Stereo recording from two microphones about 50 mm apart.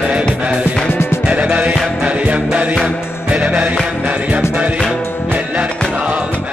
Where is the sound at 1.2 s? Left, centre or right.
Right.